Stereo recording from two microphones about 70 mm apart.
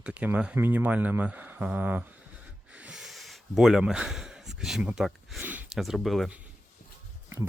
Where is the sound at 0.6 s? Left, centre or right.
Right.